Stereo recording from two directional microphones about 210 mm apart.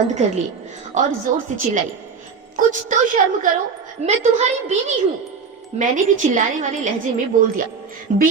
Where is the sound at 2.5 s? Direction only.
40° right (ahead or behind).